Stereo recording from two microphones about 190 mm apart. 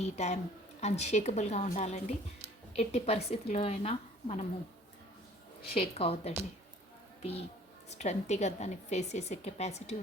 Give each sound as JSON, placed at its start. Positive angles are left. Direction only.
{"t": 0.0, "sound": "a woman's voice", "side_deg": 35}
{"t": 5.7, "sound": "a woman's voice", "side_deg": 30}
{"t": 7.9, "sound": "a woman's voice", "side_deg": 35}